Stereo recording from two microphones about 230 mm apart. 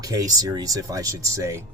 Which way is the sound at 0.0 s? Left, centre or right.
Centre.